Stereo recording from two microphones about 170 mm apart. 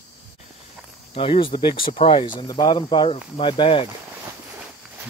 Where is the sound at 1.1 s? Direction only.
30° left (ahead or behind).